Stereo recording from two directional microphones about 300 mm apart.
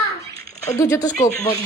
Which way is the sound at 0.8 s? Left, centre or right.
Centre.